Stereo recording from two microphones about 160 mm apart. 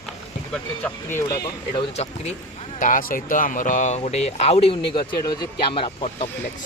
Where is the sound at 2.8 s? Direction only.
55° left (ahead or behind); by 6.3 s 40° left (ahead or behind).